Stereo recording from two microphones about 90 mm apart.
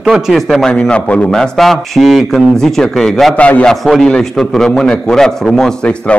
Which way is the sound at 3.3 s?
15° left (ahead or behind).